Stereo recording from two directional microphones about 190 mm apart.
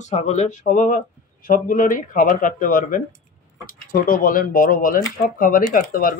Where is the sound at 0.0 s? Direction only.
35° left (ahead or behind).